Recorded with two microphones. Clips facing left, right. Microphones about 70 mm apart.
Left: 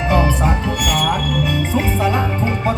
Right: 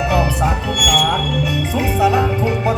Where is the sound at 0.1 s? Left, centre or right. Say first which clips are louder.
Even; centre.